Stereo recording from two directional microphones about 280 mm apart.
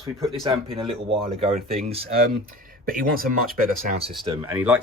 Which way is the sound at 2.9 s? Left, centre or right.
Right.